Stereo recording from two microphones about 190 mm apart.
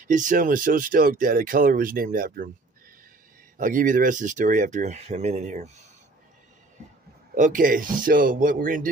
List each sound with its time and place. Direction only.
0.0 s speech: 40° right (ahead or behind)
3.5 s speech: 45° right (ahead or behind)
7.3 s speech: 45° right (ahead or behind)